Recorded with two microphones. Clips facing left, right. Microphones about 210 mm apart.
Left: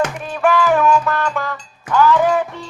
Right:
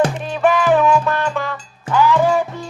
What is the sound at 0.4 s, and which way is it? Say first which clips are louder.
Music: right 1 dB; 20° right (ahead or behind).